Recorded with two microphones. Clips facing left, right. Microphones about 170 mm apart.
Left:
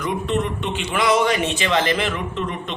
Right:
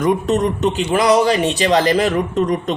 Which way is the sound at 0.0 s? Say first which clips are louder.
Right 7 dB; 40° right (ahead or behind).